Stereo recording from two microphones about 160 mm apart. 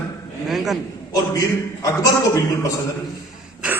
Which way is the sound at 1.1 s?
20° left (ahead or behind).